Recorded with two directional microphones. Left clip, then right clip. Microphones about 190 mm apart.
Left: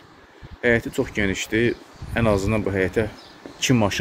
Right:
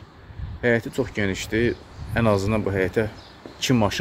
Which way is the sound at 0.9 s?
5° left (ahead or behind).